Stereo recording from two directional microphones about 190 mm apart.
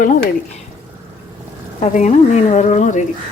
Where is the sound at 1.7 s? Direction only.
35° left (ahead or behind).